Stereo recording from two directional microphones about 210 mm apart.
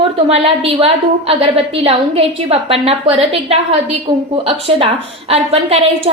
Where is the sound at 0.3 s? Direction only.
30° right (ahead or behind).